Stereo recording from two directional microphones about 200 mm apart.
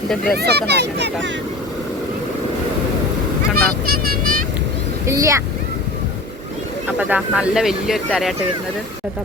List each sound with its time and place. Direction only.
0.3 s speech: 55° right (ahead or behind)
3.5 s a child's voice: 50° right (ahead or behind)
5.0 s speech: 15° right (ahead or behind)
7.0 s speech: 5° right (ahead or behind)